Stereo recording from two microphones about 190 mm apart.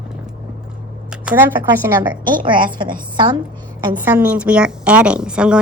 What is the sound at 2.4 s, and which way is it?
A woman's voice, 25° right (ahead or behind).